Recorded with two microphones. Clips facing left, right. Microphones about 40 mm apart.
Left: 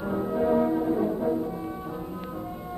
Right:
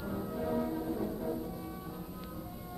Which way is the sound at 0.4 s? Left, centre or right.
Left.